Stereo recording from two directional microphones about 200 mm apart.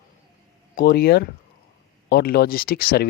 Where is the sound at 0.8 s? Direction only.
50° left (ahead or behind).